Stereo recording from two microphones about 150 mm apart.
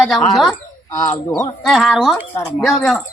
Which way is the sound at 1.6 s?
Centre (ahead or behind).